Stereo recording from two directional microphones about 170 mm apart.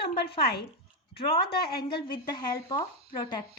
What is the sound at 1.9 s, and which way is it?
Speech, 25° left (ahead or behind).